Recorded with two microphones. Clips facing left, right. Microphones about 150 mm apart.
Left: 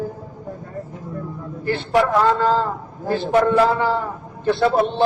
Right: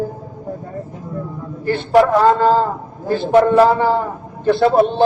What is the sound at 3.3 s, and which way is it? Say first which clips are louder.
Mantra: right 5 dB; 55° right (ahead or behind).